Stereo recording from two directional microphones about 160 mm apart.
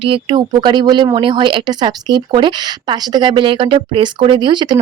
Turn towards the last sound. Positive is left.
turn(degrees=-30)  # may be behind; listen again after turning